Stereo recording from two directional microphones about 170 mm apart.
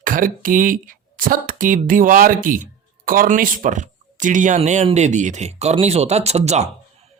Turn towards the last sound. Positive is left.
turn(degrees=-40)  # may be behind; listen again after turning